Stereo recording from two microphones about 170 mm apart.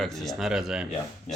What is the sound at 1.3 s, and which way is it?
Speech, 45° left (ahead or behind).